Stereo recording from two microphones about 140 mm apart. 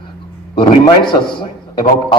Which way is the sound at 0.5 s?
35° left (ahead or behind).